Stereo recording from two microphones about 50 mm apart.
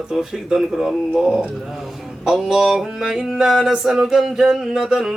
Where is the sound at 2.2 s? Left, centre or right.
Centre.